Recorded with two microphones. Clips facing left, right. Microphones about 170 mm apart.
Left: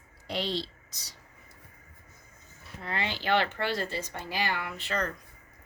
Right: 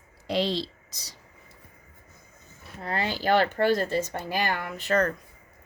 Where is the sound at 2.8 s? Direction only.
40° right (ahead or behind).